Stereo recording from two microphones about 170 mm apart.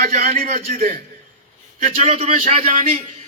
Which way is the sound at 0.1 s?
45° right (ahead or behind).